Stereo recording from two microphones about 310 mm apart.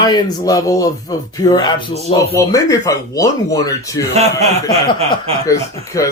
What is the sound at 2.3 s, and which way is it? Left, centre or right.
Speech, centre.